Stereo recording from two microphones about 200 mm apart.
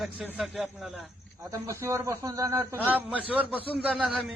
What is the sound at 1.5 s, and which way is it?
A man's voice, 15° right (ahead or behind).